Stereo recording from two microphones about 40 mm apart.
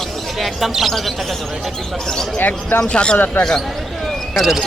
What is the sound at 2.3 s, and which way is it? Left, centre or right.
Speech, left.